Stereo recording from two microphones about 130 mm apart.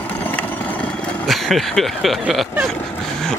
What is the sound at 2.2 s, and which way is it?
Speech, 10° right (ahead or behind).